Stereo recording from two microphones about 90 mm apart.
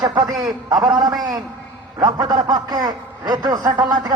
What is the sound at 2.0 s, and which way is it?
A man's voice, 50° right (ahead or behind).